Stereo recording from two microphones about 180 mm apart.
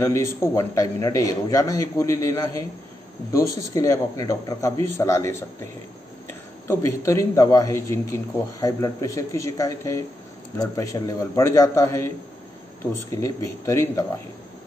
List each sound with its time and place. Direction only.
0.0 s a man's voice: 15° left (ahead or behind)
6.7 s a man's voice: 15° left (ahead or behind)
13.1 s a man's voice: 15° left (ahead or behind)